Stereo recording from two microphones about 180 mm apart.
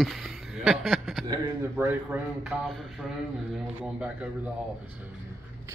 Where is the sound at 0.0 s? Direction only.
Centre (ahead or behind).